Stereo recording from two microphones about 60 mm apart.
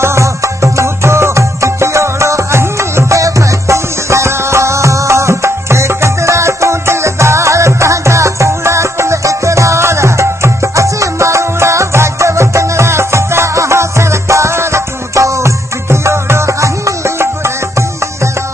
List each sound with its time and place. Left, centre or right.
0.0 s music: right